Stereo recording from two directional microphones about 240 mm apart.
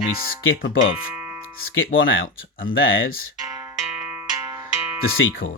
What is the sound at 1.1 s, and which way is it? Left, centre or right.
Music, centre.